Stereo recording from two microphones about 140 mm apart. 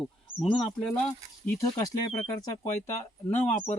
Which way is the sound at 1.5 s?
25° left (ahead or behind).